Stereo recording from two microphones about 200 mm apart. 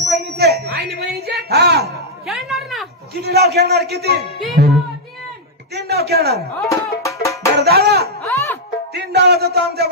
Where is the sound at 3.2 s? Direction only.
50° right (ahead or behind).